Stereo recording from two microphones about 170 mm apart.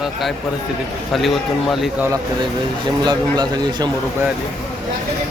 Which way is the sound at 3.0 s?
25° right (ahead or behind).